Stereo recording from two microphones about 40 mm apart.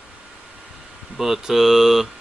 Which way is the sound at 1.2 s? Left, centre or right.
Centre.